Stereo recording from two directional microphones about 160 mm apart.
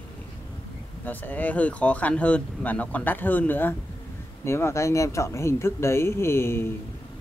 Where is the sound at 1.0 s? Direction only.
10° left (ahead or behind).